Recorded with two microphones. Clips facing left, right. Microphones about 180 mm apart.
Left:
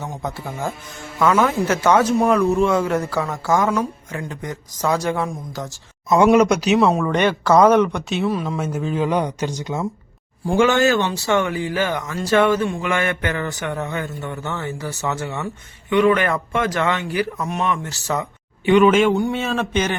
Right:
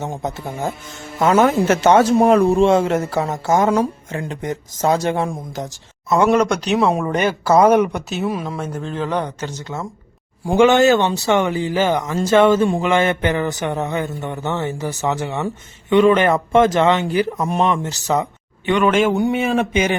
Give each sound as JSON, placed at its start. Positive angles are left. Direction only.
{"t": 0.0, "sound": "a man's voice", "side_deg": -20}
{"t": 6.2, "sound": "speech", "side_deg": 10}
{"t": 6.9, "sound": "speech", "side_deg": -10}
{"t": 8.5, "sound": "speech", "side_deg": 5}
{"t": 10.4, "sound": "a man's voice", "side_deg": -15}
{"t": 17.3, "sound": "a man's voice", "side_deg": -35}
{"t": 18.7, "sound": "speech", "side_deg": 5}
{"t": 19.1, "sound": "speech", "side_deg": -15}